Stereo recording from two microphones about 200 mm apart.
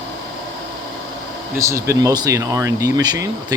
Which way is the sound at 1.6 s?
15° right (ahead or behind).